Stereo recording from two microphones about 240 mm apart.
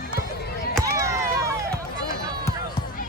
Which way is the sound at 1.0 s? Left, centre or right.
Centre.